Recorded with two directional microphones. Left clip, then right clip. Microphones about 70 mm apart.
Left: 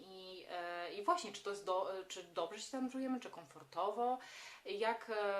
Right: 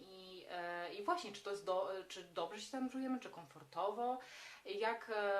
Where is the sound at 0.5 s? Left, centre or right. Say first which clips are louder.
Left 1 dB; left.